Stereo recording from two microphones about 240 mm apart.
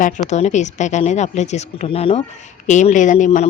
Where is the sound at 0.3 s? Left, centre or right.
Left.